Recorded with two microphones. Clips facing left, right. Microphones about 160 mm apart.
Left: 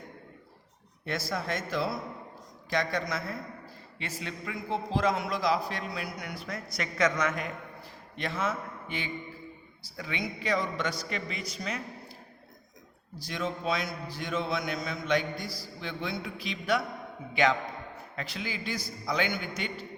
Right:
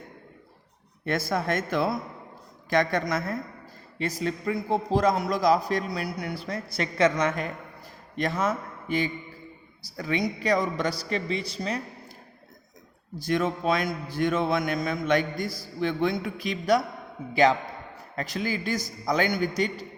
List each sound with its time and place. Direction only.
1.0 s a man's voice: 50° right (ahead or behind); by 11.8 s 30° right (ahead or behind)
13.1 s a man's voice: 55° right (ahead or behind)